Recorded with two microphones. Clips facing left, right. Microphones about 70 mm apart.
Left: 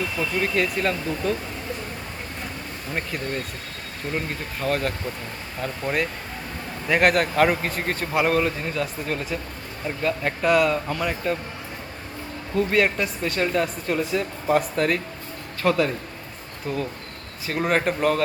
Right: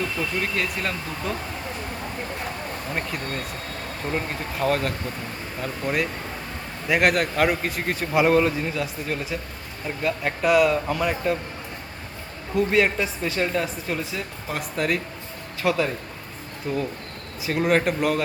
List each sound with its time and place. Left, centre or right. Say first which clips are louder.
0.0 s speech: left 1 dB; centre
2.9 s speech: left 3 dB; centre
4.6 s speech: right 1 dB; centre
12.5 s speech: even; centre